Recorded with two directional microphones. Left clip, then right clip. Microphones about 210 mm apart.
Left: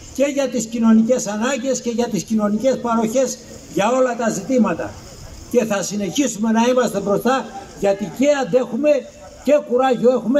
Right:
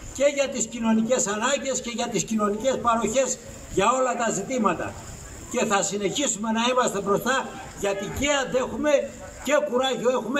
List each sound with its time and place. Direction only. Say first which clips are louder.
0.2 s a man's voice: left 3 dB; 35° left (ahead or behind)